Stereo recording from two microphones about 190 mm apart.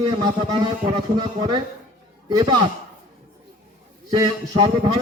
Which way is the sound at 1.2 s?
20° right (ahead or behind).